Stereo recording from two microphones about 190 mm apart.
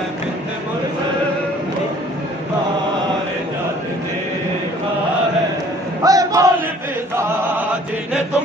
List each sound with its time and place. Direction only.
6.0 s battle cry: 20° right (ahead or behind)